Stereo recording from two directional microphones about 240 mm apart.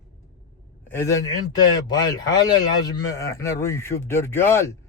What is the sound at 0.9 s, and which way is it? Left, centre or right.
Speech, centre.